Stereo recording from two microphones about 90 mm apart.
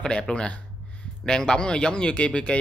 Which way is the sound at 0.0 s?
10° left (ahead or behind).